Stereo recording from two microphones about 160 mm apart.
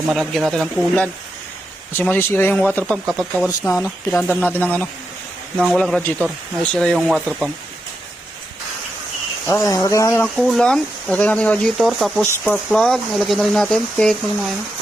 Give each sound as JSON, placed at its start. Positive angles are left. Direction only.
{"t": 0.1, "sound": "speech", "side_deg": 0}
{"t": 3.6, "sound": "speech", "side_deg": 20}
{"t": 9.5, "sound": "speech", "side_deg": 20}
{"t": 10.3, "sound": "speech", "side_deg": 0}